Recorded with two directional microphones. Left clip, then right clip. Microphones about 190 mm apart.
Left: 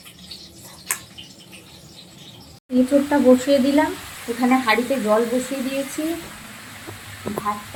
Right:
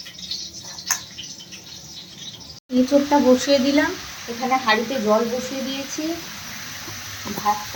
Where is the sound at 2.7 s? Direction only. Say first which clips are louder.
Right 1 dB; centre (ahead or behind).